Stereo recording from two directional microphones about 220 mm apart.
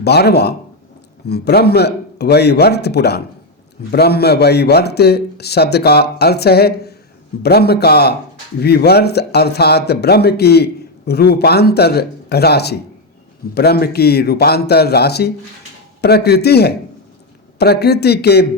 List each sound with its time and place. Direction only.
0.0 s speech: 50° left (ahead or behind)